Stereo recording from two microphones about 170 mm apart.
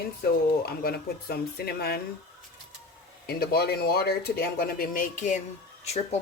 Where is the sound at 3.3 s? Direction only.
70° left (ahead or behind); by 5.4 s 45° left (ahead or behind).